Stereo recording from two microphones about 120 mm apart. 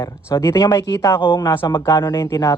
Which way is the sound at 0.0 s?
25° left (ahead or behind).